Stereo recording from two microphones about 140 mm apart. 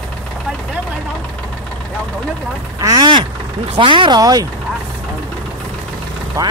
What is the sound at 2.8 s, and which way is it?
Speech, 30° right (ahead or behind).